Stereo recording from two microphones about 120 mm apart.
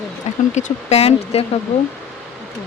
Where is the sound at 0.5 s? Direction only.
75° left (ahead or behind); by 1.4 s 60° left (ahead or behind).